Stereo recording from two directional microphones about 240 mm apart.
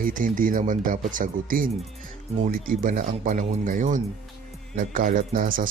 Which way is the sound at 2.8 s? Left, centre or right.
Right.